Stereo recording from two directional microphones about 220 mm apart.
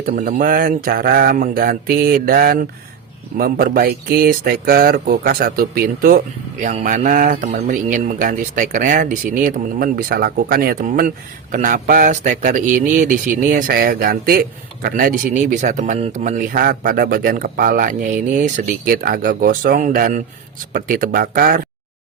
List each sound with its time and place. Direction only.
0.0 s speech: 40° right (ahead or behind)